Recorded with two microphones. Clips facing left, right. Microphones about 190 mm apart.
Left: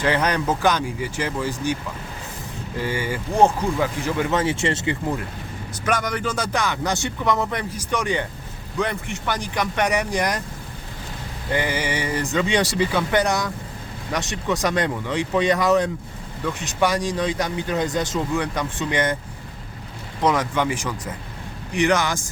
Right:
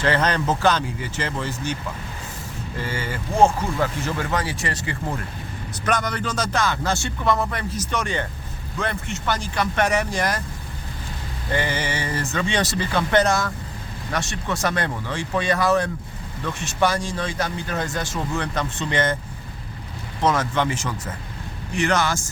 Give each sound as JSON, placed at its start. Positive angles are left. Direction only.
{"t": 0.0, "sound": "speech", "side_deg": 10}
{"t": 2.8, "sound": "speech", "side_deg": 15}
{"t": 5.8, "sound": "speech", "side_deg": 10}
{"t": 11.5, "sound": "speech", "side_deg": 10}
{"t": 20.2, "sound": "speech", "side_deg": 15}